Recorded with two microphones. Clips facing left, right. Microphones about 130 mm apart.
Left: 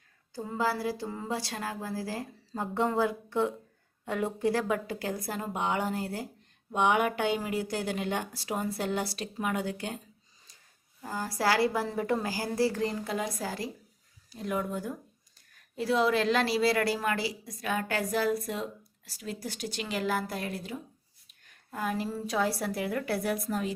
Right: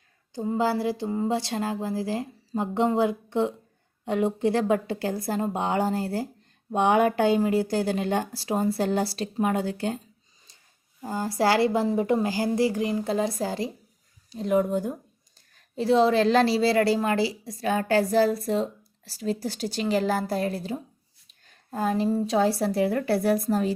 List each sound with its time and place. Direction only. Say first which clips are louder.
0.3 s a woman's voice: right 6 dB; 25° right (ahead or behind)
11.0 s a woman's voice: right 5 dB; 25° right (ahead or behind)
13.1 s a woman's voice: right 7 dB; 30° right (ahead or behind)
21.2 s a sound: right 7 dB; 30° right (ahead or behind)
22.3 s a woman's voice: right 7 dB; 25° right (ahead or behind)